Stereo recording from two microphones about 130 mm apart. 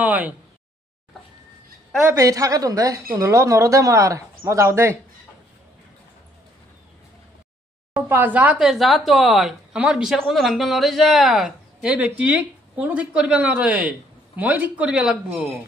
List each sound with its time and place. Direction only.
0.0 s speech: 15° right (ahead or behind)
2.0 s speech: 25° right (ahead or behind)
7.9 s speech: 15° right (ahead or behind)